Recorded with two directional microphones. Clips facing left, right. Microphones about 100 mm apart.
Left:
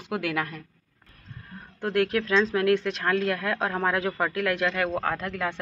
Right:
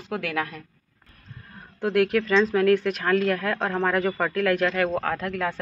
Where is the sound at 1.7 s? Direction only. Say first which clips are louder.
Right 3 dB; 5° right (ahead or behind).